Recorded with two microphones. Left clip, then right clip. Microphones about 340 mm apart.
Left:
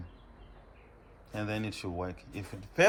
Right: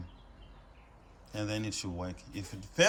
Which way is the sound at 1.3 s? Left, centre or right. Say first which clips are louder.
Even; centre.